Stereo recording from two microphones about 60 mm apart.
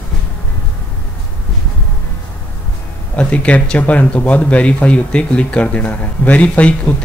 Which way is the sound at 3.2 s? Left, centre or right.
Left.